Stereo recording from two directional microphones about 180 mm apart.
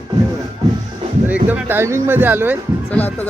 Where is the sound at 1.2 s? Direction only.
10° right (ahead or behind).